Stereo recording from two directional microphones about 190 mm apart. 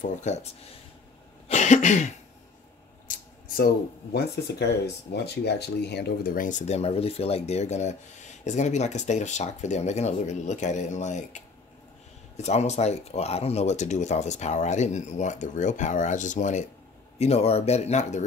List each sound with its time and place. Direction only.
0.0 s speech: 40° left (ahead or behind)
1.5 s cough: 40° left (ahead or behind)
3.1 s speech: 55° left (ahead or behind); by 18.2 s 35° left (ahead or behind)